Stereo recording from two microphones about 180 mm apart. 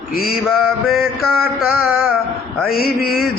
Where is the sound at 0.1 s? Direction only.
55° left (ahead or behind).